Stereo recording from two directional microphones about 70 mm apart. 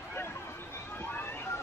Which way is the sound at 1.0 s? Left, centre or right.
Left.